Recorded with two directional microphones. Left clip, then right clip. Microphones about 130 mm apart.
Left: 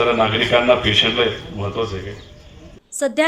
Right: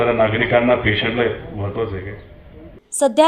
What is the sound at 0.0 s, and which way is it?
A man's voice, 90° left.